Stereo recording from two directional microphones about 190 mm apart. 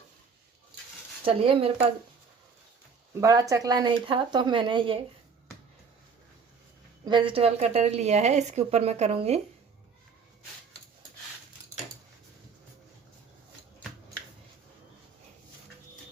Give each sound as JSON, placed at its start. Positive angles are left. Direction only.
{"t": 1.2, "sound": "speech", "side_deg": -30}
{"t": 3.2, "sound": "speech", "side_deg": -20}
{"t": 7.0, "sound": "speech", "side_deg": -25}